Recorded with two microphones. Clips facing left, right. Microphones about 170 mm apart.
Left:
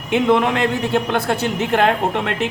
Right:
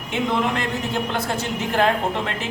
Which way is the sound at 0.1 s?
65° left (ahead or behind).